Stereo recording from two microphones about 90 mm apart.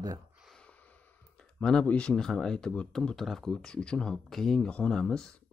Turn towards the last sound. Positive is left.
turn(degrees=10)  # may be behind; listen again after turning